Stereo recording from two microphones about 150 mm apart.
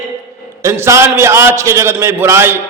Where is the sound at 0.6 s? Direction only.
20° right (ahead or behind).